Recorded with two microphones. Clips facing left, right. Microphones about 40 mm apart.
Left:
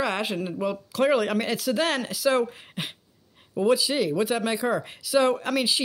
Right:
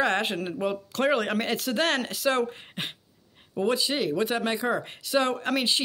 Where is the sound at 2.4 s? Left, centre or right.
Centre.